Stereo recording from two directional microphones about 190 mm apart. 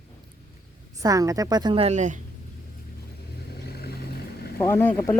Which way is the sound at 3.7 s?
55° left (ahead or behind).